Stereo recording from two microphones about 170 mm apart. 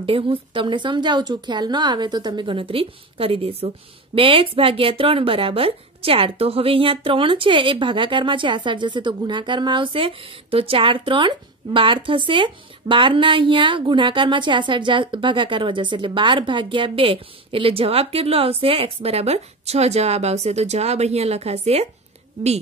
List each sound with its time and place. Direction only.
0.0 s a woman's voice: 30° right (ahead or behind)